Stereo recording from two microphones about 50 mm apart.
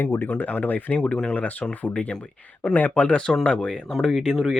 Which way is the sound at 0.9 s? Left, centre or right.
Centre.